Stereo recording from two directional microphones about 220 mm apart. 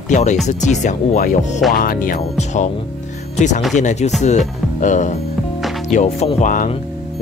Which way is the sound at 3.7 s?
30° left (ahead or behind).